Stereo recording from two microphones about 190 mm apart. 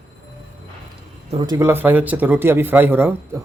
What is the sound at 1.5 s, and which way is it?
Speech, 10° right (ahead or behind).